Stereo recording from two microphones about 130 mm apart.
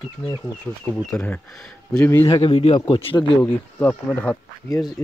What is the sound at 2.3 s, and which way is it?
Speech, 50° left (ahead or behind).